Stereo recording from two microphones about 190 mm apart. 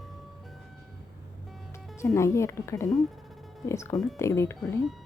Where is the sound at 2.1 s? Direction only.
15° left (ahead or behind).